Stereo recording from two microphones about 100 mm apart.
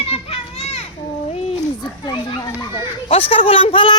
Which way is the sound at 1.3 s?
90° left.